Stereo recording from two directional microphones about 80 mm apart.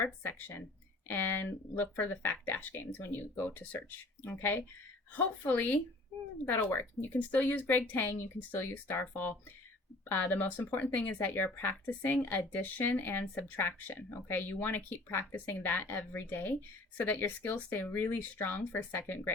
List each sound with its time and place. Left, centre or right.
0.0 s speech: left